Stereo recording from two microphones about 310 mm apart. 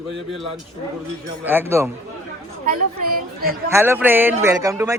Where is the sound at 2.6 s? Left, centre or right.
Right.